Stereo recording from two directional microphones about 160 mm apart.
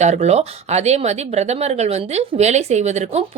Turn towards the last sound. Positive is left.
turn(degrees=-45)  # may be behind; listen again after turning